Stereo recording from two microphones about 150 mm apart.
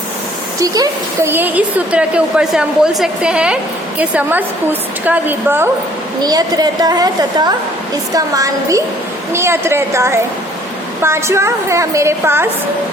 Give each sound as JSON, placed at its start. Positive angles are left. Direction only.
{"t": 0.6, "sound": "a woman's voice", "side_deg": -25}
{"t": 6.2, "sound": "a woman's voice", "side_deg": -25}